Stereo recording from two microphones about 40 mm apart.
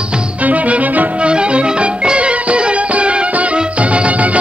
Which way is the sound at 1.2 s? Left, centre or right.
Right.